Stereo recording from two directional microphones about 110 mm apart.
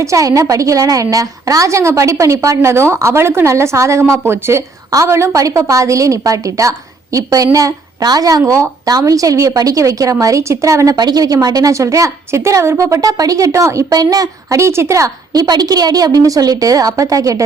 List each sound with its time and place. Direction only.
0.0 s a woman's voice: 30° right (ahead or behind)